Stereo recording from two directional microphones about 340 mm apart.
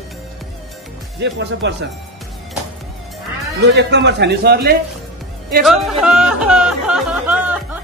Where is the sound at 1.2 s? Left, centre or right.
Right.